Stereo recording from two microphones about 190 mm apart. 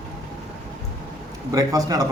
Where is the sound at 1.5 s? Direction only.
20° right (ahead or behind).